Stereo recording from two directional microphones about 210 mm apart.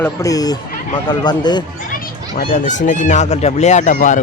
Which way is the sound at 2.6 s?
35° left (ahead or behind).